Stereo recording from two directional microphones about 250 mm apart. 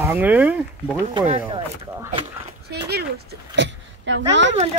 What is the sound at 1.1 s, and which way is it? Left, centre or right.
Speech, right.